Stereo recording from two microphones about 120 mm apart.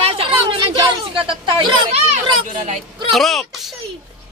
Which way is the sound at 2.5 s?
90° right.